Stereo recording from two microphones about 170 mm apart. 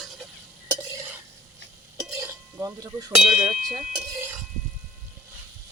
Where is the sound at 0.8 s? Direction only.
15° right (ahead or behind).